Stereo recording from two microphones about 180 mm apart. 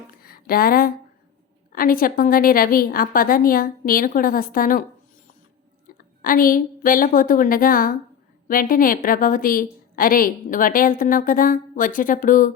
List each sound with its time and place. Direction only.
0.2 s a woman's voice: 55° left (ahead or behind)
6.0 s a woman's voice: 50° left (ahead or behind)